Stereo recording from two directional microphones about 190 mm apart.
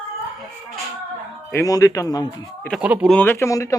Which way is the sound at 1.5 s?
15° left (ahead or behind).